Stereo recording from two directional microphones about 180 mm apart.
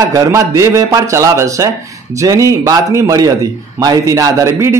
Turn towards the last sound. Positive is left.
turn(degrees=-15)  # may be behind; listen again after turning